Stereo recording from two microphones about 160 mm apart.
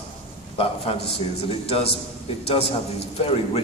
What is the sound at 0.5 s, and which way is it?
Speech, 40° left (ahead or behind).